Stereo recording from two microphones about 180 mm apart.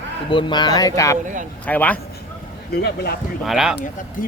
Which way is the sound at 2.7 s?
60° left (ahead or behind).